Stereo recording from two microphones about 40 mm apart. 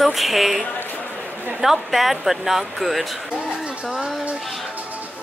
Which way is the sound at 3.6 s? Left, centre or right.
Centre.